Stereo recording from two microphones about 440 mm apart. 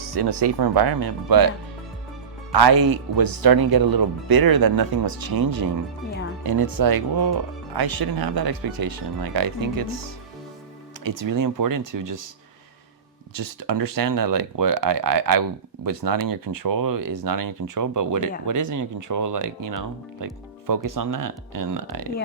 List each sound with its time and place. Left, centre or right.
0.1 s speech: right
2.5 s speech: right
13.3 s speech: right